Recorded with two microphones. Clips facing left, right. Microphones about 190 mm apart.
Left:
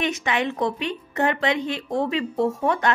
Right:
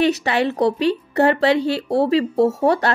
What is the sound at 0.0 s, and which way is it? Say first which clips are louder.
Speech: right 6 dB; 35° right (ahead or behind).